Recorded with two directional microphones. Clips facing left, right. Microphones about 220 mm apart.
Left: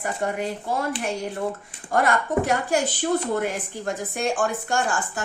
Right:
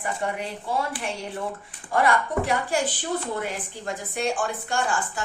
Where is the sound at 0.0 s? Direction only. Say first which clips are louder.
Left 3 dB; 45° left (ahead or behind).